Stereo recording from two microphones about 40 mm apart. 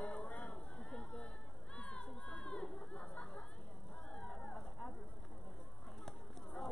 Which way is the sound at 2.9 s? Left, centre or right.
Left.